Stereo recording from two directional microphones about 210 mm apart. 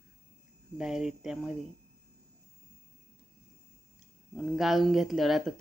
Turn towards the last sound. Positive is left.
turn(degrees=0)  # may be behind; listen again after turning